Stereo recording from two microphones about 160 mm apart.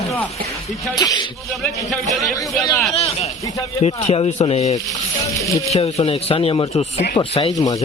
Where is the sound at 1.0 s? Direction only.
25° left (ahead or behind).